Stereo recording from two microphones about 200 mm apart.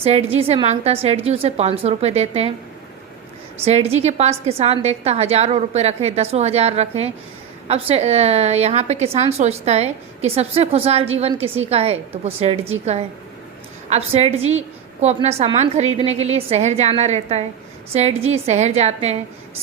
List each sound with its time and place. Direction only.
0.0 s a woman's voice: 30° right (ahead or behind)
3.6 s a woman's voice: 30° right (ahead or behind)